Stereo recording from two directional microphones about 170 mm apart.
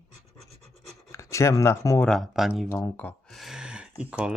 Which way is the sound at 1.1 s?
15° left (ahead or behind).